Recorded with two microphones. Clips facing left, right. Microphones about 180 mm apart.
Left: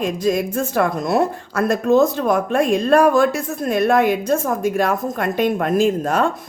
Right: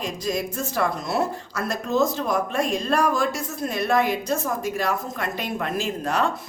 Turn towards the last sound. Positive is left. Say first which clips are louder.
# left 7 dB
turn(degrees=50)  # may be behind; listen again after turning